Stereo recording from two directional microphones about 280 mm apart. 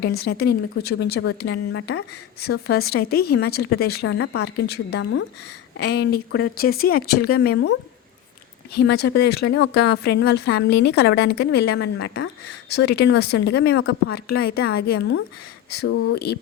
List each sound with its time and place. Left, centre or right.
0.1 s speech: left